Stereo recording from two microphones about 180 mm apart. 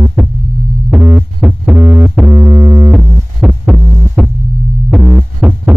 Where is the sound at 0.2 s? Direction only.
5° right (ahead or behind).